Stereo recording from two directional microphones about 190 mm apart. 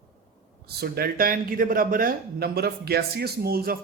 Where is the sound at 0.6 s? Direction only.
55° right (ahead or behind).